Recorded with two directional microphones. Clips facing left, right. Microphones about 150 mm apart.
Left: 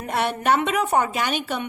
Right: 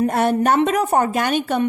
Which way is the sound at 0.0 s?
45° right (ahead or behind).